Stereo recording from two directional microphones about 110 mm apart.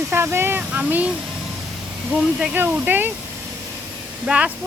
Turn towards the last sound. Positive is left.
turn(degrees=-10)  # may be behind; listen again after turning